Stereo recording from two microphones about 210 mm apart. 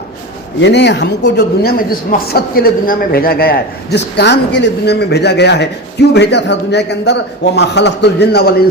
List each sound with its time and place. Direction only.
0.6 s speech: 55° left (ahead or behind)